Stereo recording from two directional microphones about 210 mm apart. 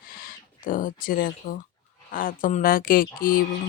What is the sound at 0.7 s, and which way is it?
Speech, 40° left (ahead or behind).